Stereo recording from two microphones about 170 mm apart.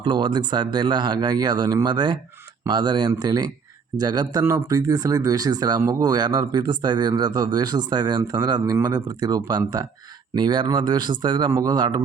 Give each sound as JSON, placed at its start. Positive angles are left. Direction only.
{"t": 0.0, "sound": "speech", "side_deg": -25}